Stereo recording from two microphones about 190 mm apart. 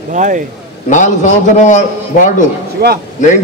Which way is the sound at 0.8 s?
40° left (ahead or behind).